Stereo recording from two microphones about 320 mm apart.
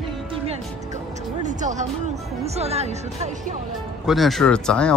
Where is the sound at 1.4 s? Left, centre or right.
Right.